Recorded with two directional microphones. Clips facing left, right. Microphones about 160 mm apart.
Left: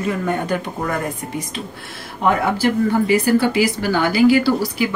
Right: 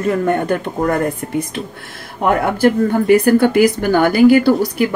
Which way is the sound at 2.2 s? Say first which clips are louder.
Right 4 dB; 55° right (ahead or behind).